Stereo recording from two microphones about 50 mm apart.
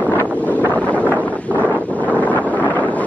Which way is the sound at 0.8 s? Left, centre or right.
Left.